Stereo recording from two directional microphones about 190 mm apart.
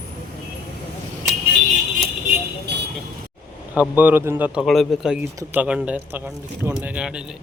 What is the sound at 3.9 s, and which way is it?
Speech, 10° right (ahead or behind).